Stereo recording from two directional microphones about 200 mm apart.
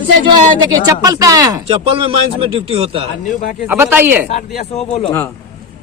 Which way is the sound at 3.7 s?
10° right (ahead or behind).